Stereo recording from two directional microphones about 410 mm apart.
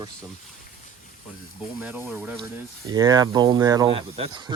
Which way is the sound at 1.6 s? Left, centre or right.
Centre.